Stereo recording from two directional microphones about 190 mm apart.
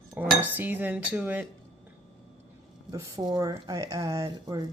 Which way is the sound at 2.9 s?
20° right (ahead or behind).